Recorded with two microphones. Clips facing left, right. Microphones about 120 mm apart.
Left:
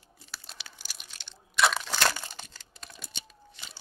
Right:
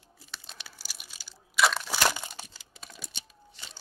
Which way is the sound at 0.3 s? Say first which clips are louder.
Even; centre (ahead or behind).